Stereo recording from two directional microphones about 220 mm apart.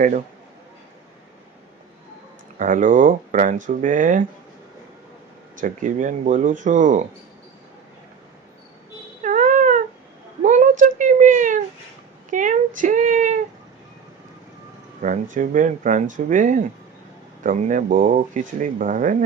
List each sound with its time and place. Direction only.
2.6 s speech: 35° right (ahead or behind)
5.5 s speech: 35° right (ahead or behind)
9.2 s a sound: 35° right (ahead or behind)
15.0 s speech: 35° right (ahead or behind)